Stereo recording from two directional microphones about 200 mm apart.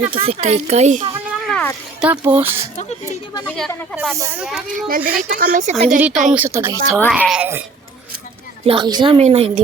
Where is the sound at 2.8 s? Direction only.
35° left (ahead or behind).